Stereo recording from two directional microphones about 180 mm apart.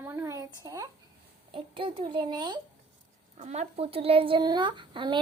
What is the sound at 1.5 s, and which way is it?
Speech, 30° right (ahead or behind).